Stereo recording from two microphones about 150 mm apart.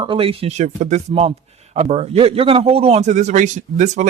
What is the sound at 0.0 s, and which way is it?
Speech, 35° right (ahead or behind).